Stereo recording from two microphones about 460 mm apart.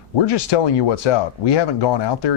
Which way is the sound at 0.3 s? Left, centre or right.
Left.